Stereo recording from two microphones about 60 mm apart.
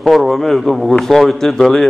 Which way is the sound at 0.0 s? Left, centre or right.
Centre.